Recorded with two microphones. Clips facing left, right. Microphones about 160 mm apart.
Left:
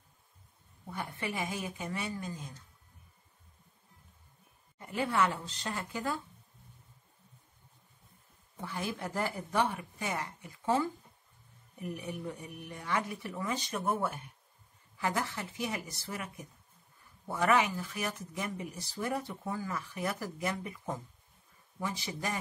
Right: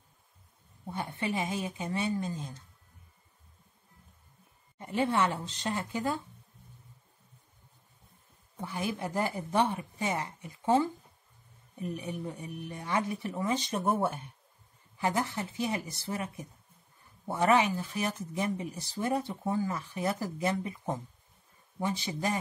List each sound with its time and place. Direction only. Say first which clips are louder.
0.8 s speech: right 4 dB; 25° right (ahead or behind)
4.7 s speech: right 2 dB; 25° right (ahead or behind)
8.5 s speech: right 3 dB; 15° right (ahead or behind)